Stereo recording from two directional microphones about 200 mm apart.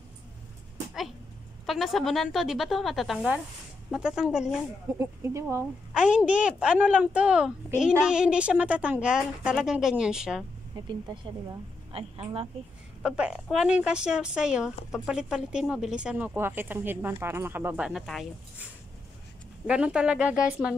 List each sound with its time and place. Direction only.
1.7 s a woman's voice: centre (ahead or behind)
10.9 s a woman's voice: 20° right (ahead or behind)
13.0 s a woman's voice: 5° right (ahead or behind)